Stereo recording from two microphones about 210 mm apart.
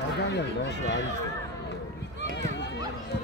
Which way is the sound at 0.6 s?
55° left (ahead or behind).